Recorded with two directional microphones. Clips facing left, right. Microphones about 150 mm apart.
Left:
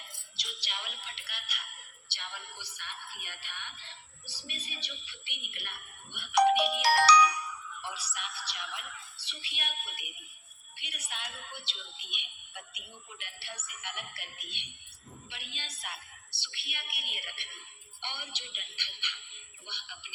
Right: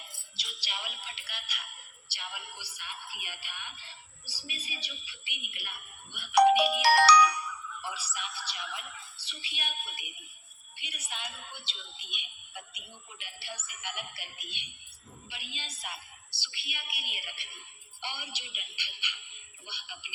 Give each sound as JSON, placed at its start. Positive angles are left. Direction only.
{"t": 0.0, "sound": "speech", "side_deg": -5}
{"t": 6.8, "sound": "music", "side_deg": -65}
{"t": 7.8, "sound": "speech", "side_deg": 0}